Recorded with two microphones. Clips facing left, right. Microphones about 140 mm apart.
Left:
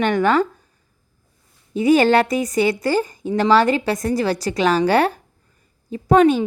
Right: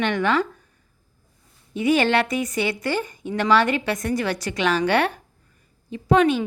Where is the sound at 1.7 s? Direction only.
40° left (ahead or behind).